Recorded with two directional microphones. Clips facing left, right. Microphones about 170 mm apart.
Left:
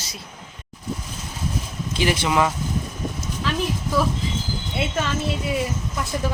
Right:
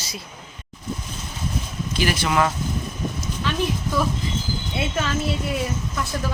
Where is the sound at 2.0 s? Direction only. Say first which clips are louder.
Left 1 dB; 20° left (ahead or behind).